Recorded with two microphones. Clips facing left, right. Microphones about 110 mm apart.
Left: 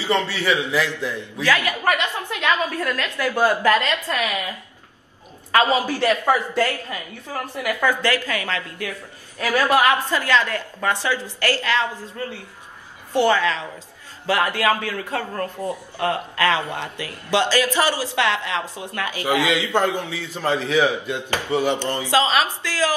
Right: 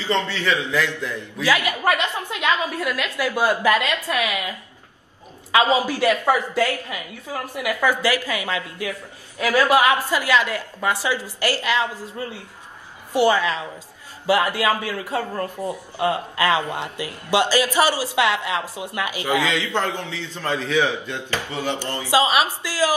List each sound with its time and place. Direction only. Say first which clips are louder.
0.0 s a man's voice: left 1 dB; 10° left (ahead or behind)
1.4 s a man's voice: even; 15° right (ahead or behind)
5.5 s a man's voice: even; 15° right (ahead or behind)
19.4 s a man's voice: left 3 dB; 15° left (ahead or behind)
22.1 s a man's voice: right 1 dB; 15° right (ahead or behind)